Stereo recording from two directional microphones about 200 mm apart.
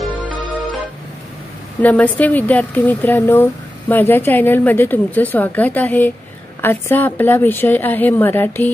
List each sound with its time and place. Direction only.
1.8 s a woman's voice: 10° left (ahead or behind)